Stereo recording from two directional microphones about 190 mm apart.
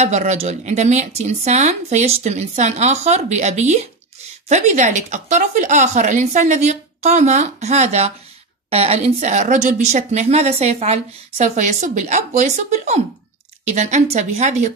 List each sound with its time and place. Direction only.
0.0 s speech: 35° right (ahead or behind)